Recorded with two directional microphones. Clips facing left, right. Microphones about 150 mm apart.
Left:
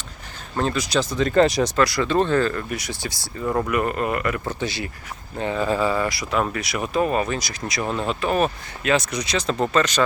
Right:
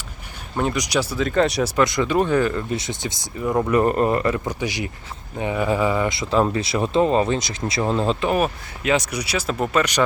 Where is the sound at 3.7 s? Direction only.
35° right (ahead or behind).